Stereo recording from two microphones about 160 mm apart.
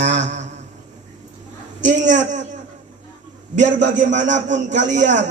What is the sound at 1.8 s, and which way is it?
Speech, 50° right (ahead or behind).